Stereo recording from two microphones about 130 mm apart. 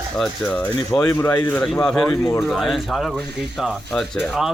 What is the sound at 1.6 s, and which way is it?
Speech, 5° left (ahead or behind).